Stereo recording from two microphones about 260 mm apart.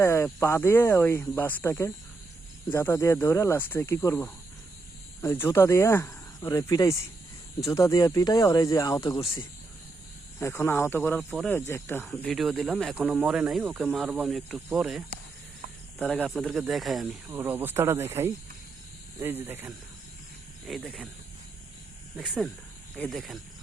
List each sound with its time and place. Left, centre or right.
0.0 s speech: centre
23.0 s speech: centre